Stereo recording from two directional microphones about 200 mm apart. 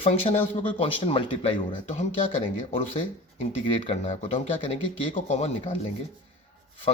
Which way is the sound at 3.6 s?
25° left (ahead or behind).